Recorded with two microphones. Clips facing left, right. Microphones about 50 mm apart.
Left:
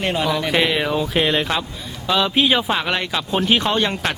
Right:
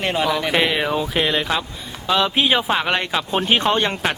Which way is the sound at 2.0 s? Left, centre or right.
Centre.